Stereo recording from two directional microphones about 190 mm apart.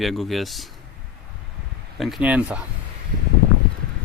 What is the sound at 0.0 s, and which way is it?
Speech, centre (ahead or behind).